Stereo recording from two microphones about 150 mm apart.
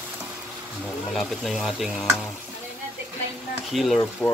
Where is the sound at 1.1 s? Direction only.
Centre (ahead or behind).